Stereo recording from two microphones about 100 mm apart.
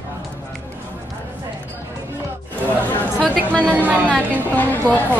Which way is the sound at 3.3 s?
10° left (ahead or behind).